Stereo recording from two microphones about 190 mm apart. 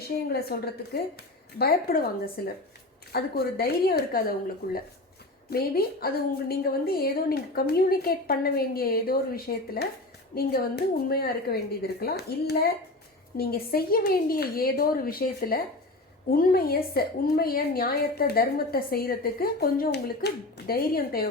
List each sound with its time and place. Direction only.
0.3 s a woman's voice: 55° left (ahead or behind)